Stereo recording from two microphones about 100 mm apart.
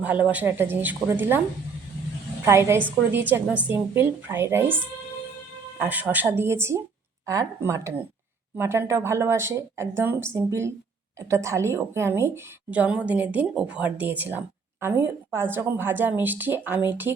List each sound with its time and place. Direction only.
0.0 s a woman's voice: 15° right (ahead or behind)
2.4 s a woman's voice: 25° right (ahead or behind)
5.8 s speech: 15° right (ahead or behind)
12.7 s a woman's voice: 15° right (ahead or behind)